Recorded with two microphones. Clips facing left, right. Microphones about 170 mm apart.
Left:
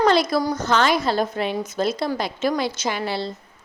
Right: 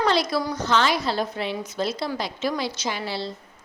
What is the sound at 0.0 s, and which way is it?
A woman's voice, 50° left (ahead or behind).